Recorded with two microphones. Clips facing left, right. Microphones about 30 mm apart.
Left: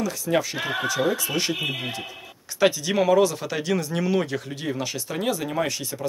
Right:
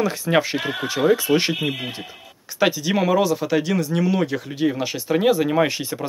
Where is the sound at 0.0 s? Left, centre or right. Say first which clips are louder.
Right 4 dB; right.